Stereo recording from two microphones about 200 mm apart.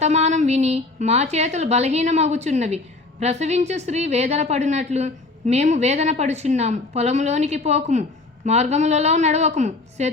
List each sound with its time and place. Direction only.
0.0 s a woman's voice: 35° right (ahead or behind)